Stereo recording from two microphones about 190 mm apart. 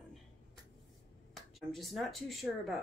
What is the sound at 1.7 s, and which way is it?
Speech, centre (ahead or behind).